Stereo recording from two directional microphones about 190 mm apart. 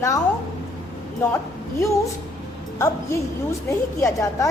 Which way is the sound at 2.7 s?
15° left (ahead or behind).